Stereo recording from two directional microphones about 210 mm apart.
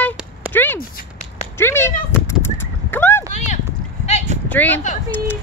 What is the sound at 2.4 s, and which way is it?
Horse, 10° left (ahead or behind).